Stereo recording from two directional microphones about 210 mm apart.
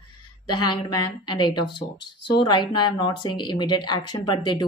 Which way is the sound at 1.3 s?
20° left (ahead or behind).